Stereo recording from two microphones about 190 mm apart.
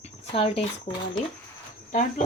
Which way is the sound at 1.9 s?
40° left (ahead or behind).